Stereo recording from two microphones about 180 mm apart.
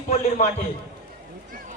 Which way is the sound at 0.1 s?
40° left (ahead or behind).